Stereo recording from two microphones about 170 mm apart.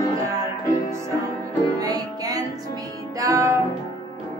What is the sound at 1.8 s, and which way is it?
Music, 20° right (ahead or behind).